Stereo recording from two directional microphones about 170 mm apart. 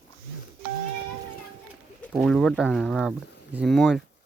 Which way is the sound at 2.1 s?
Centre (ahead or behind).